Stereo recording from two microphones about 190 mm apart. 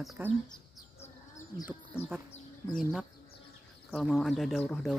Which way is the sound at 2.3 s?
45° left (ahead or behind).